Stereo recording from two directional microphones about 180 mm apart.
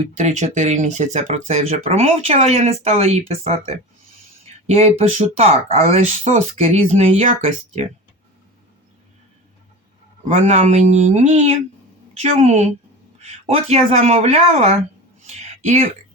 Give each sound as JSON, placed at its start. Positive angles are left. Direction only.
{"t": 0.0, "sound": "speech", "side_deg": -40}
{"t": 4.6, "sound": "speech", "side_deg": -35}
{"t": 10.2, "sound": "speech", "side_deg": -40}
{"t": 15.2, "sound": "a sound", "side_deg": -40}